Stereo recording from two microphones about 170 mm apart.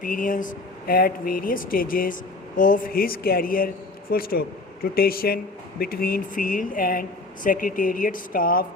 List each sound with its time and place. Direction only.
0.0 s speech: 55° left (ahead or behind)